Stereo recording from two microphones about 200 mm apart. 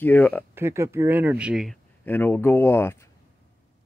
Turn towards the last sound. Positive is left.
turn(degrees=15)  # may be behind; listen again after turning